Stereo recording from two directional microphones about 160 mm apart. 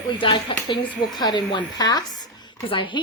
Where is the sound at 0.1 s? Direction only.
30° left (ahead or behind).